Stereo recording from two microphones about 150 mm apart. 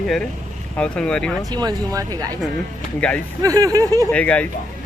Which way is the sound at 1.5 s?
25° right (ahead or behind).